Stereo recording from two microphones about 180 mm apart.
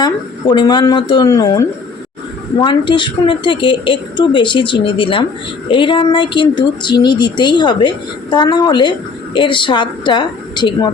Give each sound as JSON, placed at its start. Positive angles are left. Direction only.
{"t": 0.0, "sound": "speech", "side_deg": 25}